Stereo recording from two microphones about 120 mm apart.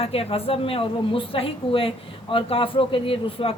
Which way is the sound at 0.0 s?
55° left (ahead or behind).